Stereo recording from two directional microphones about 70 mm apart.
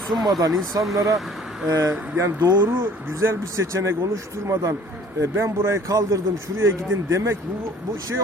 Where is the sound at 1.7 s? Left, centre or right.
Right.